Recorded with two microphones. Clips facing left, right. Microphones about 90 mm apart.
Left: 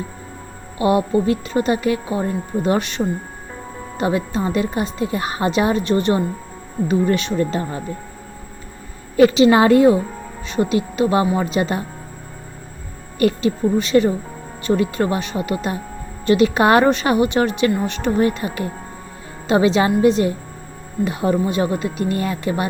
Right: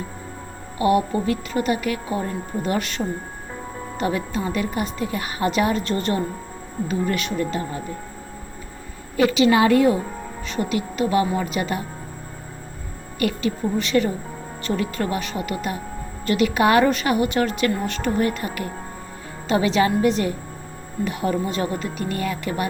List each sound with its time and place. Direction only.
0.8 s speech: 25° left (ahead or behind)
9.1 s speech: 30° left (ahead or behind)
13.1 s speech: 35° left (ahead or behind)
13.7 s speech: 20° left (ahead or behind)